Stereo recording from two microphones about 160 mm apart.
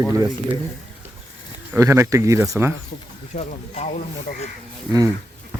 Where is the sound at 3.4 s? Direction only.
45° left (ahead or behind).